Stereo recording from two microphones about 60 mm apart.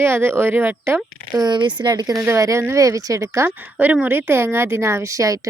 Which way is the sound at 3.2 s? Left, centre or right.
Right.